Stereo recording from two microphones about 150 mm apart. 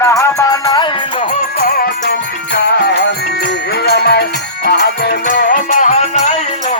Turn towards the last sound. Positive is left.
turn(degrees=55)  # may be behind; listen again after turning